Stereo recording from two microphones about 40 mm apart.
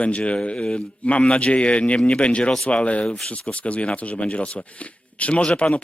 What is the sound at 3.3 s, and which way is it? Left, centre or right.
Speech, left.